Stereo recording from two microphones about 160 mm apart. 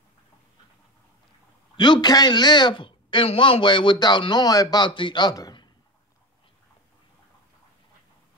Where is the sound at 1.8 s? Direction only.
25° left (ahead or behind).